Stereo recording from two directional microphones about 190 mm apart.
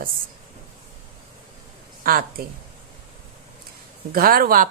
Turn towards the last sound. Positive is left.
turn(degrees=-50)  # may be behind; listen again after turning